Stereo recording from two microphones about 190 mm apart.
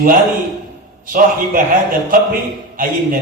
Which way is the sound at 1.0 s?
45° right (ahead or behind).